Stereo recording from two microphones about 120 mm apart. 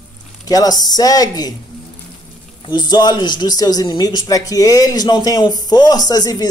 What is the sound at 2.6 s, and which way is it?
Speech, 35° left (ahead or behind).